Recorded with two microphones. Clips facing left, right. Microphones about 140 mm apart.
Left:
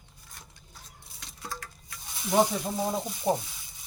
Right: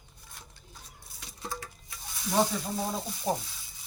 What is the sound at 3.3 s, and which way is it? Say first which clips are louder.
Speech: left 4 dB; 20° left (ahead or behind).